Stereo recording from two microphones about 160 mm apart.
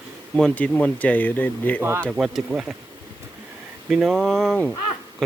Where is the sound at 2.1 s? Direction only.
5° right (ahead or behind).